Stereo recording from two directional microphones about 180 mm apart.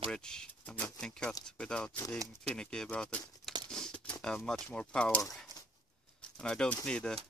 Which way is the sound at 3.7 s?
5° left (ahead or behind).